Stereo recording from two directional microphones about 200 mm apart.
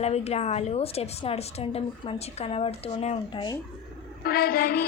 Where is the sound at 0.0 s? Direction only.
30° left (ahead or behind).